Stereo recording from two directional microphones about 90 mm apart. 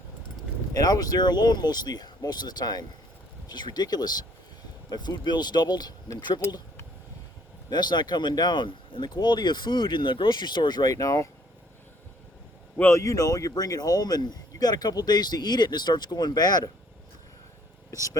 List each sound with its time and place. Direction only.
0.7 s speech: 45° left (ahead or behind)
7.7 s speech: 55° left (ahead or behind); by 11.3 s 40° left (ahead or behind)
12.7 s speech: 25° left (ahead or behind); by 16.7 s 45° left (ahead or behind)
17.9 s speech: 40° left (ahead or behind)